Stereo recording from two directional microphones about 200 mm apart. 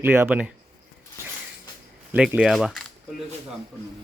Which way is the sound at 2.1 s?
5° right (ahead or behind).